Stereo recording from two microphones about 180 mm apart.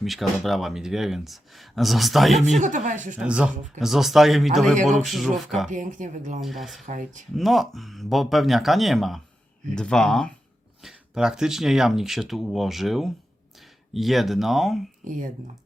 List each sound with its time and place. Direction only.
0.0 s speech: centre (ahead or behind)
2.6 s speech: 45° right (ahead or behind)
3.2 s speech: 5° right (ahead or behind)
4.7 s speech: 45° right (ahead or behind)
5.0 s speech: centre (ahead or behind)
5.7 s speech: 45° right (ahead or behind)
6.4 s speech: centre (ahead or behind)
6.8 s speech: 45° right (ahead or behind)
7.3 s speech: centre (ahead or behind)
15.0 s speech: 45° right (ahead or behind)